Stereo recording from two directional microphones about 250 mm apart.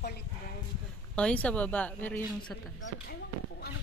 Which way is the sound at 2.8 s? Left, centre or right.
Left.